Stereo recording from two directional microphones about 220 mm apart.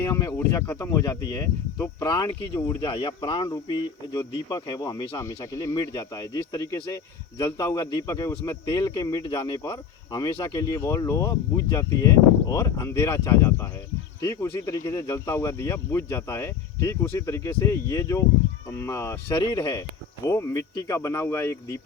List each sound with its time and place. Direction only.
0.0 s speech: 15° left (ahead or behind)